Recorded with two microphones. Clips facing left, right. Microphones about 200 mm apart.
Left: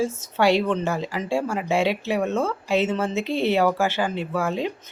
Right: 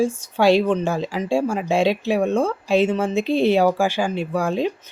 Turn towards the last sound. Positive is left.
turn(degrees=-15)  # may be behind; listen again after turning